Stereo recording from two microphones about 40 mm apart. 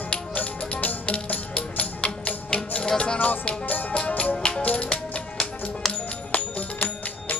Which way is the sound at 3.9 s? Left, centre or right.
Left.